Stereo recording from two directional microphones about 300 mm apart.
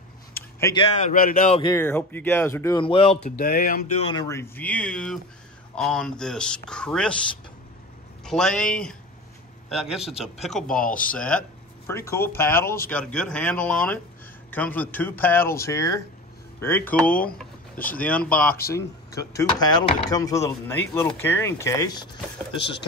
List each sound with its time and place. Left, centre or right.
0.3 s a sound: centre
0.9 s speech: left; by 7.2 s centre
8.3 s a man's voice: centre
17.7 s speech: left
18.0 s speech: centre
18.5 s speech: left
18.8 s speech: centre